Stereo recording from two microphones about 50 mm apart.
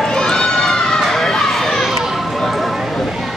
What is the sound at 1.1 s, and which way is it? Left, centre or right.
Emergency vehicle, centre.